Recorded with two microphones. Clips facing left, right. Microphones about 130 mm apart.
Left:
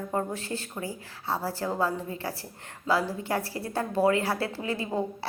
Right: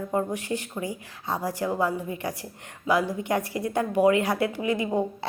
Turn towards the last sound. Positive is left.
turn(degrees=-15)  # may be behind; listen again after turning